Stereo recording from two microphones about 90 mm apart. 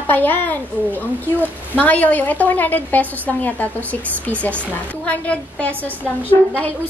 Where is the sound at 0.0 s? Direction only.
20° left (ahead or behind).